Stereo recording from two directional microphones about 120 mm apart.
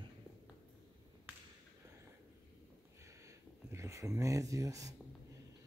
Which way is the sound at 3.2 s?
25° right (ahead or behind).